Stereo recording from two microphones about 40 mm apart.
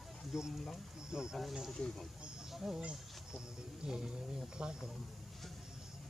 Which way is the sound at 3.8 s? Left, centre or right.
Centre.